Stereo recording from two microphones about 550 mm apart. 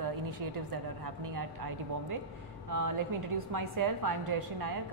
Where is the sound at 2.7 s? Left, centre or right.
Right.